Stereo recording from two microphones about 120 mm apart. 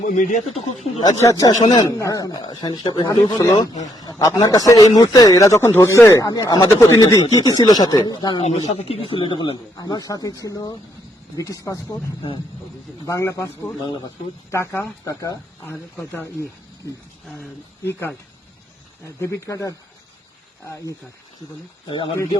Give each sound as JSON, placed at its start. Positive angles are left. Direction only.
{"t": 0.1, "sound": "speech", "side_deg": 90}
{"t": 1.0, "sound": "speech", "side_deg": 30}
{"t": 8.4, "sound": "speech", "side_deg": 65}
{"t": 13.1, "sound": "speech", "side_deg": 25}
{"t": 19.0, "sound": "speech", "side_deg": 25}
{"t": 21.8, "sound": "speech", "side_deg": 45}